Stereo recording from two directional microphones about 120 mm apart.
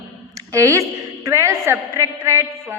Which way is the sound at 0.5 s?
25° right (ahead or behind).